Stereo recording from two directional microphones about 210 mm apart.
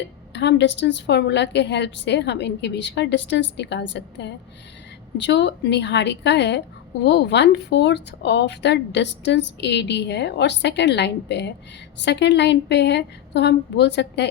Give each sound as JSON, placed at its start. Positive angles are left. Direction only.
{"t": 0.3, "sound": "a woman's voice", "side_deg": 55}